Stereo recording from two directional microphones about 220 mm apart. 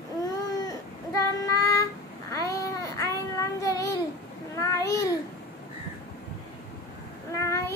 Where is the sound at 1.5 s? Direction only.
15° left (ahead or behind).